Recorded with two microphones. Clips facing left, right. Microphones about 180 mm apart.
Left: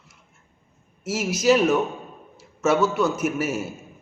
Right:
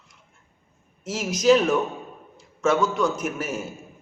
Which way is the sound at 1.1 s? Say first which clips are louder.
Right 1 dB; 5° left (ahead or behind).